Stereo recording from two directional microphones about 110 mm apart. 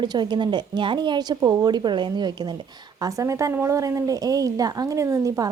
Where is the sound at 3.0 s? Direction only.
30° right (ahead or behind).